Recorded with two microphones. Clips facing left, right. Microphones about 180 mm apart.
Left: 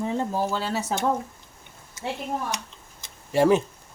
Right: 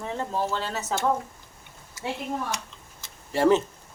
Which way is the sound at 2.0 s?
20° left (ahead or behind).